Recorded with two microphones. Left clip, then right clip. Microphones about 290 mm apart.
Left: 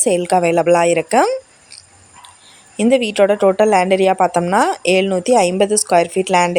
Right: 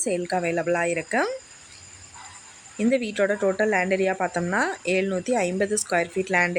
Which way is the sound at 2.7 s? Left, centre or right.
Left.